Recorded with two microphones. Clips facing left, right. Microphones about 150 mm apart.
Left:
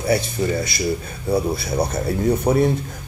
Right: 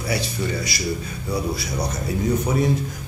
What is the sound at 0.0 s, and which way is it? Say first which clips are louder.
Speech: left 5 dB; 50° left (ahead or behind).